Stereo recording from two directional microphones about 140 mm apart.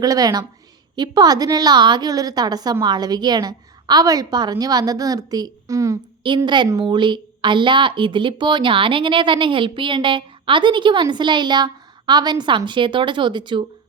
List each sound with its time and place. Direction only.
0.0 s a woman's voice: 25° right (ahead or behind)
6.2 s a woman's voice: 35° right (ahead or behind)